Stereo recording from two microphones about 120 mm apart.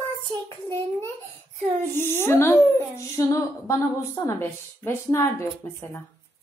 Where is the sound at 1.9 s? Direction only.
20° left (ahead or behind).